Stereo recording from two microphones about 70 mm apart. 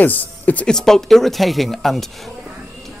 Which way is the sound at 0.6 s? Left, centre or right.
Centre.